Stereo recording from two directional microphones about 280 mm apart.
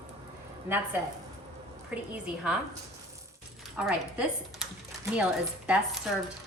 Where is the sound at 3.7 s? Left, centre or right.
Centre.